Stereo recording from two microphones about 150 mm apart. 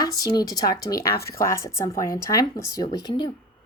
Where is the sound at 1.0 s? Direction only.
90° left.